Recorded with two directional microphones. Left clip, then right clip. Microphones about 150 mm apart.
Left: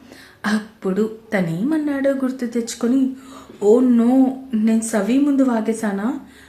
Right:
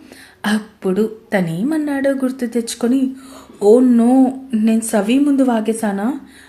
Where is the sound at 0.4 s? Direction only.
25° right (ahead or behind).